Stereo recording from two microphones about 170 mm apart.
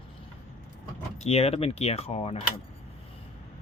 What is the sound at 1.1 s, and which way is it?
Speech, 40° left (ahead or behind).